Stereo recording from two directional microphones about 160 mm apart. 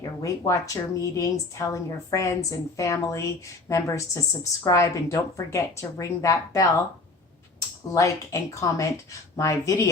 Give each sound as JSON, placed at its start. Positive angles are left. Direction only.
{"t": 0.0, "sound": "a woman's voice", "side_deg": 20}
{"t": 7.9, "sound": "a woman's voice", "side_deg": 20}